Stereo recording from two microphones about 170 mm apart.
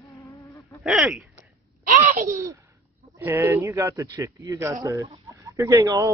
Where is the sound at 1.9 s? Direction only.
50° right (ahead or behind).